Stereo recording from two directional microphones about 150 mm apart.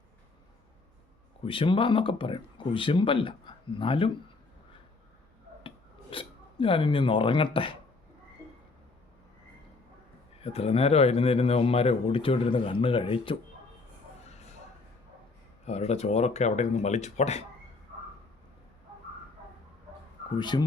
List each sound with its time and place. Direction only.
1.5 s speech: 35° left (ahead or behind)
5.6 s a sound: 35° left (ahead or behind)
10.4 s speech: 40° left (ahead or behind)
15.6 s speech: 45° left (ahead or behind)
20.3 s speech: 30° left (ahead or behind)